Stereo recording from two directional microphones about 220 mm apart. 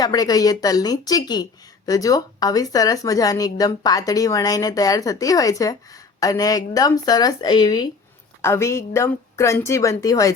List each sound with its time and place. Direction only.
0.0 s speech: 15° left (ahead or behind)